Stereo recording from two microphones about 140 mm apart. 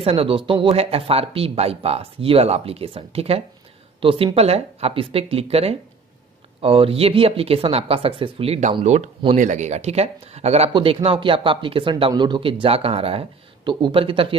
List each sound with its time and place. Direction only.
0.0 s speech: 40° right (ahead or behind)